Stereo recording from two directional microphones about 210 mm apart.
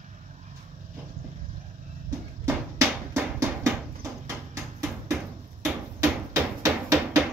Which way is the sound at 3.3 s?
15° right (ahead or behind).